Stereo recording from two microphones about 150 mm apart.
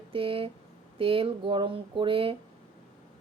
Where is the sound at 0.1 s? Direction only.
35° right (ahead or behind).